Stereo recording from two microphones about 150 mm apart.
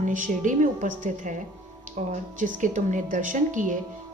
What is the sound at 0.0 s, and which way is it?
A woman's voice, 60° right (ahead or behind).